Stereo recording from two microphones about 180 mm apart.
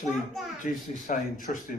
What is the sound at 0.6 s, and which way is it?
Speech, 45° left (ahead or behind).